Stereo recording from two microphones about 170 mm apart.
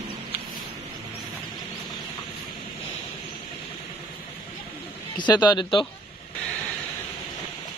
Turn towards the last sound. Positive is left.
turn(degrees=30)  # may be behind; listen again after turning